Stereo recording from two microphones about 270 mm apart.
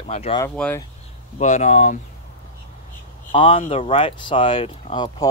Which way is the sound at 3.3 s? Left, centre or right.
Centre.